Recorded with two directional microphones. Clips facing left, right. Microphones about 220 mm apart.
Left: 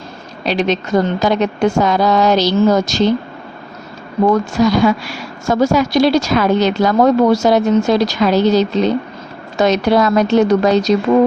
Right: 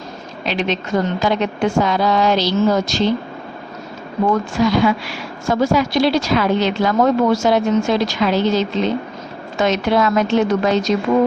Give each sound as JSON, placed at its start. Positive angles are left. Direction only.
{"t": 0.4, "sound": "a woman's voice", "side_deg": 40}
{"t": 4.3, "sound": "a woman's voice", "side_deg": 40}